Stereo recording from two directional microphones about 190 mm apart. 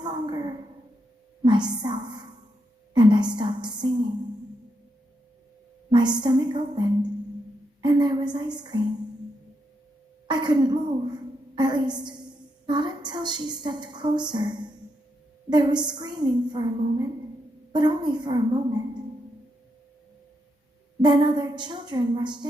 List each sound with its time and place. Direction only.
0.0 s a sound: 20° right (ahead or behind)
1.5 s a woman's voice: 20° right (ahead or behind)
5.9 s a woman's voice: 25° right (ahead or behind)
10.2 s a woman's voice: 25° right (ahead or behind)
21.0 s a woman's voice: 25° right (ahead or behind)